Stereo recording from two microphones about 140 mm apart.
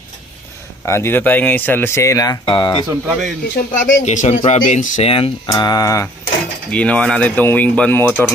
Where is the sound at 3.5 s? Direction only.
65° left (ahead or behind).